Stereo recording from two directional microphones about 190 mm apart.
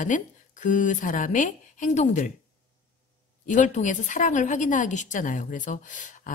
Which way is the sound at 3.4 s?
40° left (ahead or behind).